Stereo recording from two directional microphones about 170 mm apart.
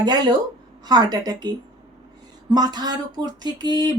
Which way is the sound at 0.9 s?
20° right (ahead or behind).